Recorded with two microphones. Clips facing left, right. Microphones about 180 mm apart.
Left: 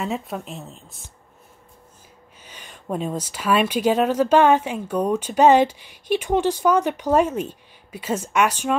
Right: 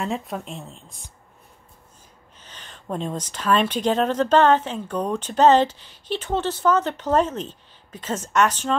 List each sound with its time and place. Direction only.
0.0 s speech: centre (ahead or behind)
2.4 s speech: 10° left (ahead or behind)